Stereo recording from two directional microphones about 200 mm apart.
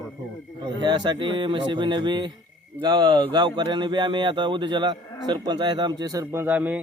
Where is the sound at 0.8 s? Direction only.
20° right (ahead or behind).